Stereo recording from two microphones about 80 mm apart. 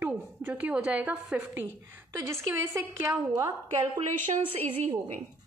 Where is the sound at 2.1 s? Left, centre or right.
Right.